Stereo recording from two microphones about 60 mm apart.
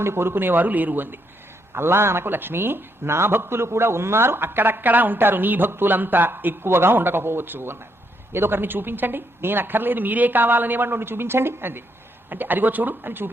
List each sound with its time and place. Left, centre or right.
0.0 s speech: right
1.7 s speech: right